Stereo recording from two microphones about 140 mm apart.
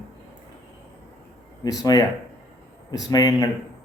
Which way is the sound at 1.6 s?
25° left (ahead or behind).